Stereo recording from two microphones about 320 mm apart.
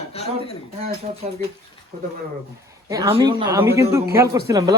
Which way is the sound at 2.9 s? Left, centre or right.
Centre.